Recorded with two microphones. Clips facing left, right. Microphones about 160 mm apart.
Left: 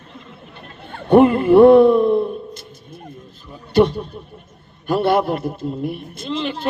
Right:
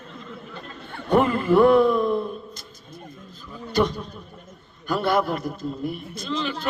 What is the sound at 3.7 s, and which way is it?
A man's voice, 30° left (ahead or behind).